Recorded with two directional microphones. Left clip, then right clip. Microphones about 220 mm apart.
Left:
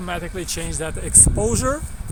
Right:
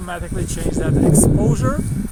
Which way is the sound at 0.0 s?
45° left (ahead or behind).